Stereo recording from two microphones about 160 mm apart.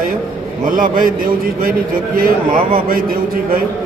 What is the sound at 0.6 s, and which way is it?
A man's voice, 60° right (ahead or behind).